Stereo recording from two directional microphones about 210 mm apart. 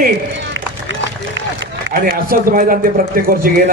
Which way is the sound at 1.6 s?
55° right (ahead or behind).